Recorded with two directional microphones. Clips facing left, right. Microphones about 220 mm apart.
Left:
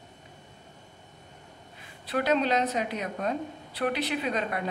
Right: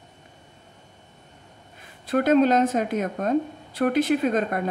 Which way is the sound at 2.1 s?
50° right (ahead or behind).